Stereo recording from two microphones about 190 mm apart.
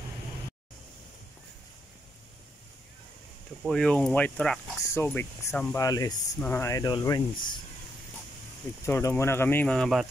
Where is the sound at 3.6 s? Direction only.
5° left (ahead or behind); by 7.6 s 20° left (ahead or behind).